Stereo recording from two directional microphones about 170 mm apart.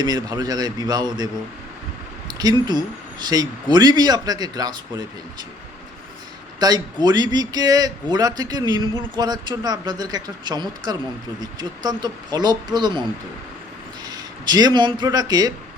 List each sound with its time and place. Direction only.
0.0 s a man's voice: 25° right (ahead or behind)
2.4 s a man's voice: 25° right (ahead or behind)
6.6 s a man's voice: 25° right (ahead or behind)
14.1 s speech: 25° right (ahead or behind)